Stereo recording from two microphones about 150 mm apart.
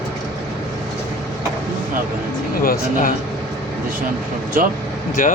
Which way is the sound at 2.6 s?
75° left (ahead or behind).